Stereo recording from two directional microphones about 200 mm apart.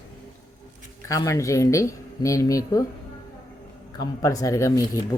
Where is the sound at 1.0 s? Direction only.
15° left (ahead or behind).